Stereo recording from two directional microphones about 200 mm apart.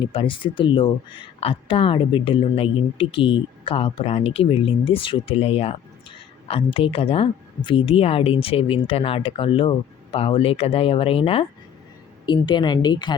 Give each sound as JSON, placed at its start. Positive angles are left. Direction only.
{"t": 0.0, "sound": "speech", "side_deg": 25}